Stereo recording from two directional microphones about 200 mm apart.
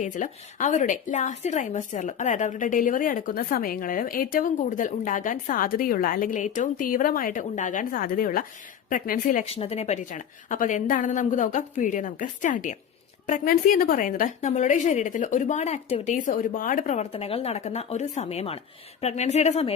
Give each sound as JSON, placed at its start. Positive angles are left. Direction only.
{"t": 0.0, "sound": "a woman's voice", "side_deg": 40}